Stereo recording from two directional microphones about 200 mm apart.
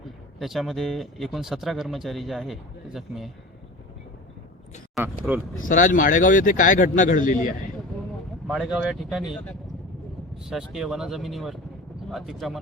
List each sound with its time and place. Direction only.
0.3 s speech: centre (ahead or behind)
4.9 s speech: 10° right (ahead or behind)
5.6 s speech: 40° left (ahead or behind)
8.4 s speech: 5° right (ahead or behind)
10.4 s speech: centre (ahead or behind)